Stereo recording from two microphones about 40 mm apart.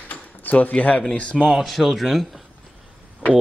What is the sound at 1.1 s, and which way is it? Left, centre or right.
Speech, left.